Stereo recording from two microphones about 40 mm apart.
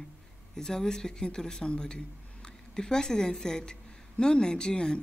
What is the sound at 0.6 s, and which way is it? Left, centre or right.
Speech, centre.